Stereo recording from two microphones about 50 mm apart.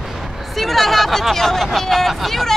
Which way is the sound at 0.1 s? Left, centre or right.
Centre.